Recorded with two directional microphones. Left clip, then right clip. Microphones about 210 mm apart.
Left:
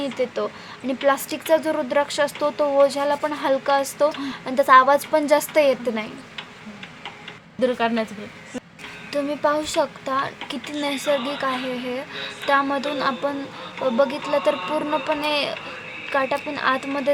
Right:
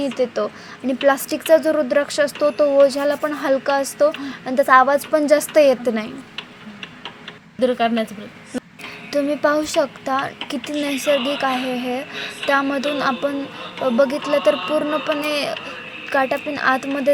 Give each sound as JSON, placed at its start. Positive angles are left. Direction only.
{"t": 0.0, "sound": "a woman's voice", "side_deg": -15}
{"t": 7.6, "sound": "a woman's voice", "side_deg": -15}
{"t": 9.1, "sound": "a woman's voice", "side_deg": -20}
{"t": 14.8, "sound": "a sound", "side_deg": -5}
{"t": 15.2, "sound": "a woman's voice", "side_deg": -15}
{"t": 16.2, "sound": "a sound", "side_deg": -5}